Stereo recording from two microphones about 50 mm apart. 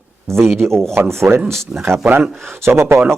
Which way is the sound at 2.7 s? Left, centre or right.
Right.